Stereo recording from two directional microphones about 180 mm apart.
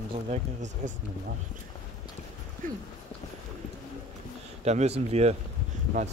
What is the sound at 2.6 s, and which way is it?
Speech, 50° right (ahead or behind).